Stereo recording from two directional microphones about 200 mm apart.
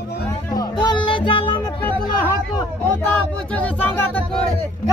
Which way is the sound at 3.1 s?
10° left (ahead or behind).